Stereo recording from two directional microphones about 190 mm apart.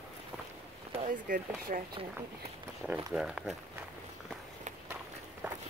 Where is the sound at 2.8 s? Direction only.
5° left (ahead or behind).